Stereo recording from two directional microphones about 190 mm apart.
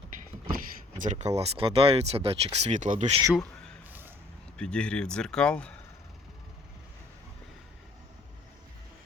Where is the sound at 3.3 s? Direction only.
5° left (ahead or behind).